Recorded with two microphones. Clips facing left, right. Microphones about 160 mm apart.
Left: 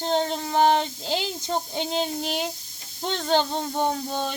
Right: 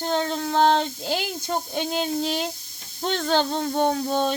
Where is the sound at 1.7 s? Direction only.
20° left (ahead or behind).